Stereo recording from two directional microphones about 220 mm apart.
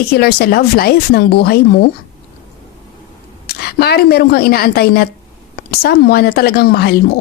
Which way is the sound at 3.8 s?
45° left (ahead or behind).